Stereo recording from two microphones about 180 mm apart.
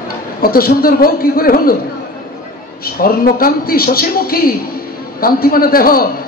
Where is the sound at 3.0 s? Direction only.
55° left (ahead or behind).